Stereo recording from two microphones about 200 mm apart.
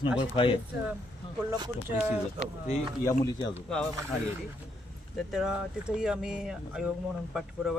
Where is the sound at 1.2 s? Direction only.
25° left (ahead or behind).